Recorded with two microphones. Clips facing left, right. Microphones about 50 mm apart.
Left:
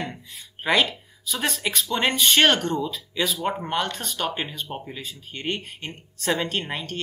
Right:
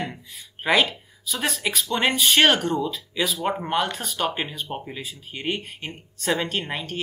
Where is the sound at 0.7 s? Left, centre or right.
Centre.